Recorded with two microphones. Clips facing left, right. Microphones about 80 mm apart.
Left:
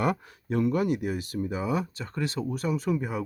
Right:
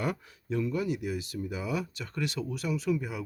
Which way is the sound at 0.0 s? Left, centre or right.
Left.